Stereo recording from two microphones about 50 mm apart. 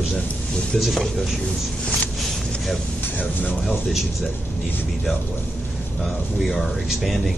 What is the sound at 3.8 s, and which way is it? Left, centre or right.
Speech, centre.